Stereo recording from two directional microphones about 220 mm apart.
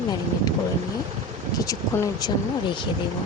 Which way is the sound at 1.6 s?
15° left (ahead or behind).